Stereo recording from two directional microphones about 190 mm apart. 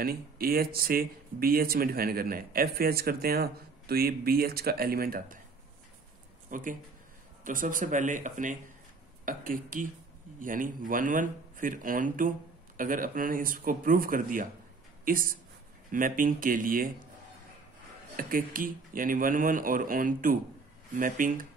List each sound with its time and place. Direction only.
0.0 s speech: 50° right (ahead or behind)
6.5 s speech: 45° right (ahead or behind)
18.1 s speech: 45° right (ahead or behind)